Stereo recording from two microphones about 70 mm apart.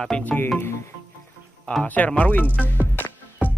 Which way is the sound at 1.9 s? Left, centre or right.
Centre.